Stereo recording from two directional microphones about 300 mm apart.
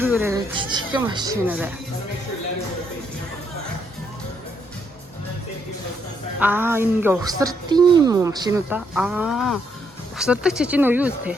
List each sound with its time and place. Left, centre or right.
0.0 s a woman's voice: centre
6.4 s a woman's voice: centre